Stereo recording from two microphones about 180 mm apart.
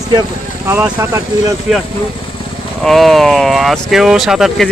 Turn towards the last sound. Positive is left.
turn(degrees=0)  # may be behind; listen again after turning